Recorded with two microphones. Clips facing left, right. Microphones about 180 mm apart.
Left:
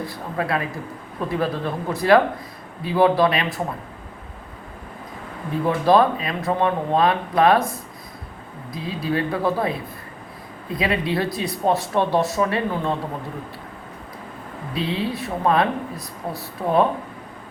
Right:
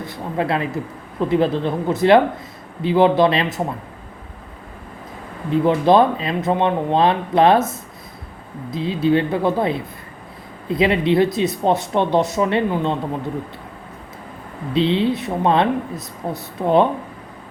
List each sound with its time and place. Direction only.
0.0 s speech: 25° right (ahead or behind)
5.6 s speech: 25° right (ahead or behind)
8.7 s speech: 25° right (ahead or behind)
14.7 s speech: 25° right (ahead or behind)